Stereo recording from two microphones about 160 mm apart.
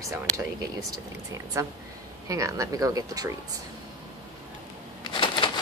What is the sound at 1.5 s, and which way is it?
Speech, 20° right (ahead or behind).